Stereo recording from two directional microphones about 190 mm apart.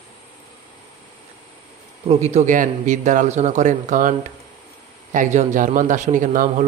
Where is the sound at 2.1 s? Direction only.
35° right (ahead or behind).